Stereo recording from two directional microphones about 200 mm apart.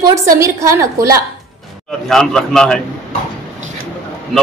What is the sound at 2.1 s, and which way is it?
Speech, centre (ahead or behind).